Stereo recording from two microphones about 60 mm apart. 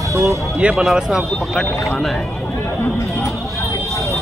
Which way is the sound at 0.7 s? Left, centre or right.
Centre.